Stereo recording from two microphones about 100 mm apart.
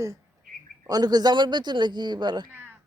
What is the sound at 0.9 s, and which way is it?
Speech, 40° right (ahead or behind).